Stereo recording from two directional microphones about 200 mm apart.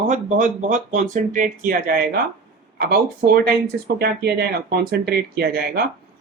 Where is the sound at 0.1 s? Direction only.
40° right (ahead or behind).